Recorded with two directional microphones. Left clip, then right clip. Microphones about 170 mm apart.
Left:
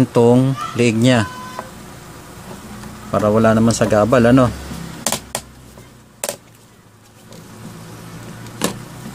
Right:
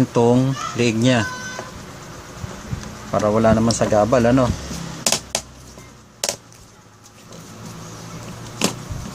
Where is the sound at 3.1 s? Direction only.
30° left (ahead or behind).